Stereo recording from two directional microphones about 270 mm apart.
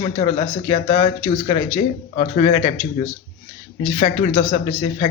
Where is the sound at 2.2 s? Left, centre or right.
Left.